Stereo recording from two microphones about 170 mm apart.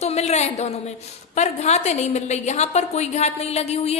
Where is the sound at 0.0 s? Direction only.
40° left (ahead or behind).